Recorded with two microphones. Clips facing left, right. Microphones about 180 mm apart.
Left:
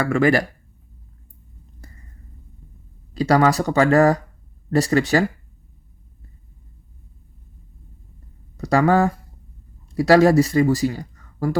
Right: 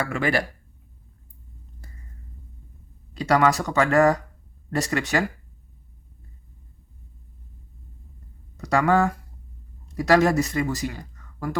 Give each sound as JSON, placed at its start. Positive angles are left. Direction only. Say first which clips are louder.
{"t": 0.0, "sound": "speech", "louder": "left 7 dB", "side_deg": 45}
{"t": 3.2, "sound": "speech", "louder": "left 3 dB", "side_deg": 35}
{"t": 8.5, "sound": "speech", "louder": "left 3 dB", "side_deg": 35}